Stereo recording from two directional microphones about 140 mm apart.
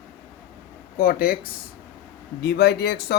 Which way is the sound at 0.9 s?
90° left.